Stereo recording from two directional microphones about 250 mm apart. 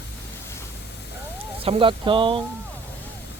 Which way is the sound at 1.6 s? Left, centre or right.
Right.